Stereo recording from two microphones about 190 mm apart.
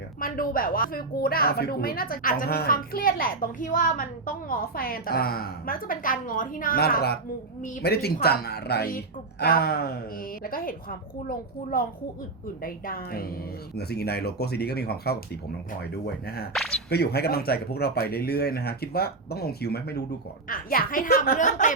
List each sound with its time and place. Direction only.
0.2 s a woman's voice: 50° left (ahead or behind)